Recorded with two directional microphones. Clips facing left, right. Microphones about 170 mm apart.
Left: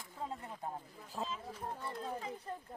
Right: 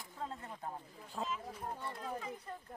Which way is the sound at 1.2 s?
5° left (ahead or behind).